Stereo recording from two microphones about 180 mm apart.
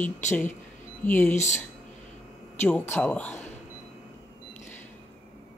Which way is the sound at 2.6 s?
10° left (ahead or behind).